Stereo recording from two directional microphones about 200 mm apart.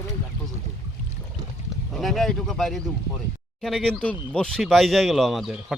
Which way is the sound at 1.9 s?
Centre (ahead or behind).